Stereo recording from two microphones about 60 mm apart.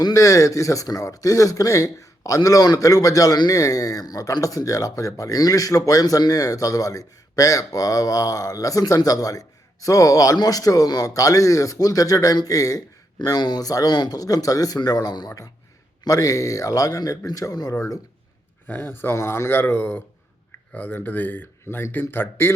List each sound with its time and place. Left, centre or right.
0.0 s speech: left
13.2 s speech: left
16.0 s speech: left
18.7 s speech: left